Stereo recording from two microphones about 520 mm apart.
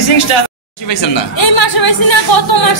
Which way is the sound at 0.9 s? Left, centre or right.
Left.